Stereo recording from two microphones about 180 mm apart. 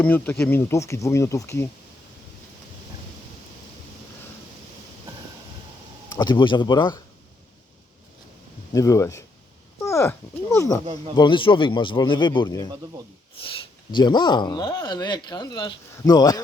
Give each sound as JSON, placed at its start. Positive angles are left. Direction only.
{"t": 0.0, "sound": "speech", "side_deg": 10}
{"t": 6.1, "sound": "speech", "side_deg": 25}
{"t": 8.7, "sound": "speech", "side_deg": 20}
{"t": 13.9, "sound": "speech", "side_deg": 25}